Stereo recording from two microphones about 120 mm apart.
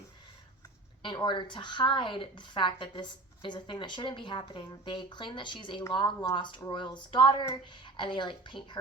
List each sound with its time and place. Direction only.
1.0 s a woman's voice: 40° left (ahead or behind)